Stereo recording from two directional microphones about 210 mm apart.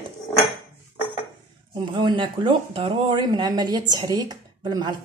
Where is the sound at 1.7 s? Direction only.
20° right (ahead or behind).